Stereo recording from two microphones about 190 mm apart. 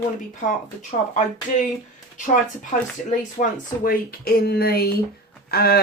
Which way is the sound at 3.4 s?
50° left (ahead or behind).